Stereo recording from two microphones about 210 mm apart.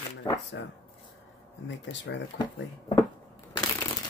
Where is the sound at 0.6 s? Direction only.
60° left (ahead or behind).